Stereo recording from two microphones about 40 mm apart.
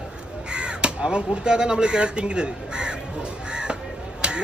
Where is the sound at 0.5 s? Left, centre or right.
Right.